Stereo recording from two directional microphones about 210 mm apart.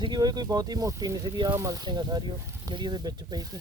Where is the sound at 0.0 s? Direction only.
20° right (ahead or behind).